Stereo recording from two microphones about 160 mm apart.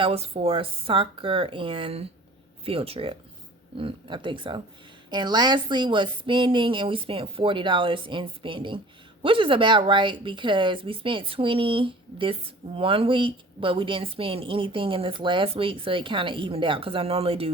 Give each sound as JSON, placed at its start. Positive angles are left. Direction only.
{"t": 0.0, "sound": "speech", "side_deg": -35}